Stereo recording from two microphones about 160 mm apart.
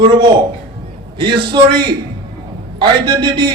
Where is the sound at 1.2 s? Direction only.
30° right (ahead or behind).